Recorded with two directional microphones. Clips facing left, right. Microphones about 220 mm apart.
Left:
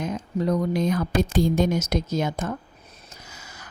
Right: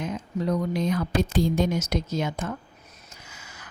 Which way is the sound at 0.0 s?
40° left (ahead or behind).